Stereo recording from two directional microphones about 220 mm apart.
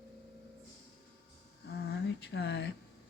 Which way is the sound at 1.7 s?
50° left (ahead or behind).